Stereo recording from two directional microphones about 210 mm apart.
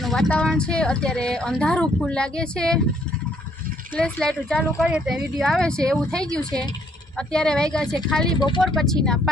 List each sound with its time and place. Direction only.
0.0 s speech: centre (ahead or behind)
3.9 s speech: 5° left (ahead or behind)
8.4 s speech: 20° left (ahead or behind)
8.6 s speech: centre (ahead or behind)